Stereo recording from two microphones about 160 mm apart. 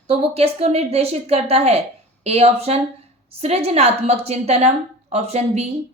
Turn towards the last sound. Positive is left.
turn(degrees=-40)  # may be behind; listen again after turning